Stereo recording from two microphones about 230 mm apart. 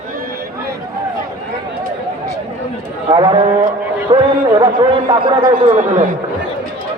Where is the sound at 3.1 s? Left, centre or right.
Right.